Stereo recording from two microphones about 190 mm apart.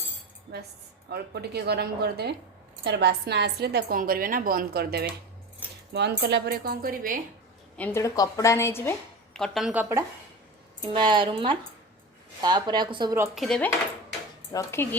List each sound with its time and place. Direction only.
0.5 s a woman's voice: 60° right (ahead or behind)
7.8 s a woman's voice: 10° left (ahead or behind)
10.8 s a woman's voice: 25° right (ahead or behind)
13.3 s cutlery: centre (ahead or behind)
14.5 s a woman's voice: 15° left (ahead or behind)